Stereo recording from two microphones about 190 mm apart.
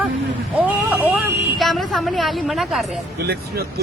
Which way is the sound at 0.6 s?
10° right (ahead or behind).